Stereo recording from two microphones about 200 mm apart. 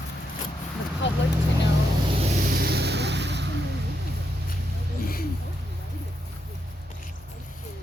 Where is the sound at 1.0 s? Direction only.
65° left (ahead or behind).